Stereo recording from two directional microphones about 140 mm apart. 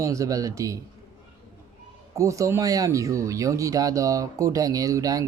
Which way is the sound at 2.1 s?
20° right (ahead or behind).